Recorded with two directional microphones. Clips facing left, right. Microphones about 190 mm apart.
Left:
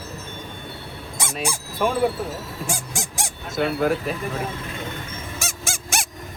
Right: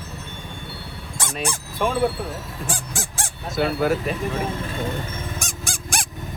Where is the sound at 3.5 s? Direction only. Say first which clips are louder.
Even; centre (ahead or behind).